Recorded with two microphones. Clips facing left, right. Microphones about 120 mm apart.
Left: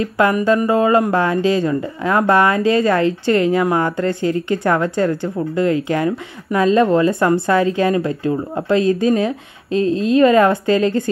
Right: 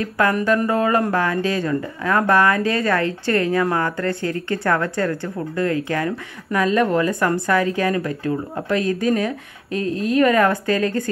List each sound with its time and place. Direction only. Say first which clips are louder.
0.0 s speech: left 4 dB; 15° left (ahead or behind)